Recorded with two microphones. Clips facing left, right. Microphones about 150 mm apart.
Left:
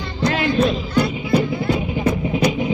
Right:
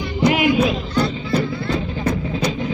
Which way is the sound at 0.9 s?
15° left (ahead or behind).